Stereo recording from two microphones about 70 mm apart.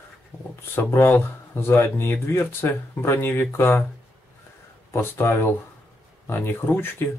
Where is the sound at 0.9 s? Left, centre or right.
Left.